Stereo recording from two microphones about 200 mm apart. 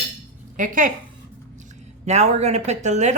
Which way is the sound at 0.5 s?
40° right (ahead or behind).